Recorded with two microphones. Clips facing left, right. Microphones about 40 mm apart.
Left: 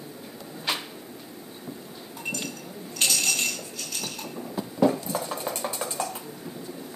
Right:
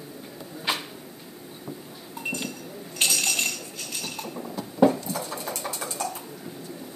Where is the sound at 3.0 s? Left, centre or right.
Centre.